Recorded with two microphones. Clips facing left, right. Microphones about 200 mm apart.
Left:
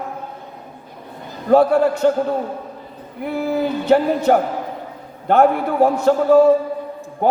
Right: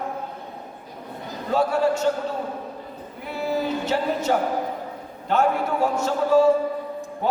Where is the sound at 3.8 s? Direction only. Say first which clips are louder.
Left 12 dB; 55° left (ahead or behind).